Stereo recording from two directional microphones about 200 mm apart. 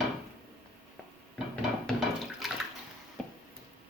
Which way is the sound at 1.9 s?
Centre (ahead or behind).